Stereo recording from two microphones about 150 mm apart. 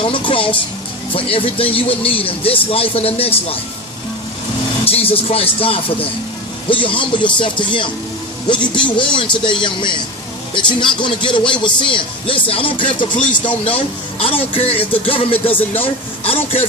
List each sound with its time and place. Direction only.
0.0 s a sound: 35° left (ahead or behind)
1.1 s a man's voice: 35° left (ahead or behind)
4.9 s a man's voice: 40° left (ahead or behind)